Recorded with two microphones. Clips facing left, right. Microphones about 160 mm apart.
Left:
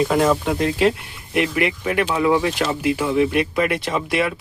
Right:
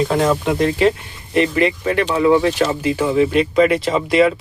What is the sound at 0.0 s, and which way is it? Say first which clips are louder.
Speech: right 1 dB; 5° left (ahead or behind).